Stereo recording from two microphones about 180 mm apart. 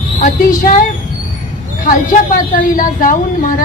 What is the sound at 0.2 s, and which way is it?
Speech, 50° left (ahead or behind).